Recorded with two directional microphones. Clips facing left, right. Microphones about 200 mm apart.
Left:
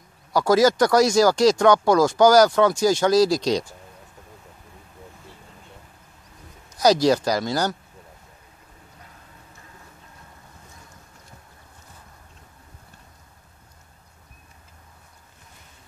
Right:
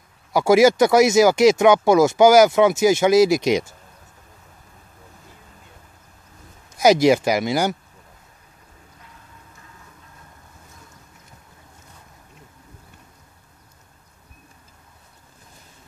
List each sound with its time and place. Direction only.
0.5 s speech: 10° right (ahead or behind)
0.7 s speech: 20° right (ahead or behind)
6.7 s speech: 25° right (ahead or behind)